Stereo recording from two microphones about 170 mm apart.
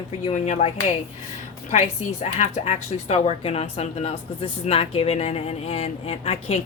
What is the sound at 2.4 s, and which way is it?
Speech, 40° left (ahead or behind).